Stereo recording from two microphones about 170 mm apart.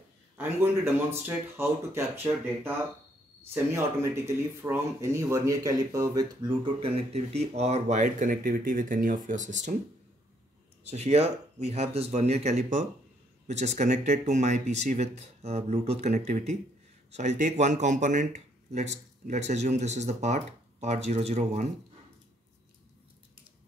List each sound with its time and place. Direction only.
0.4 s speech: 15° right (ahead or behind); by 9.7 s 45° right (ahead or behind)
10.9 s speech: 40° right (ahead or behind)